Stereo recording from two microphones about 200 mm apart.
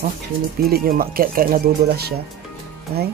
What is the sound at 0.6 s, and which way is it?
Speech, 50° right (ahead or behind).